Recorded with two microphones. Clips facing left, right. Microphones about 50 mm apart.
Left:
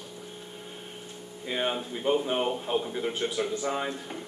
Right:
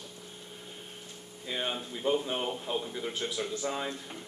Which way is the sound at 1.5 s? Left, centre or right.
Left.